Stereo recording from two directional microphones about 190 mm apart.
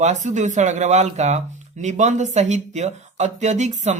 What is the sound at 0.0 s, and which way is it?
Speech, 40° right (ahead or behind).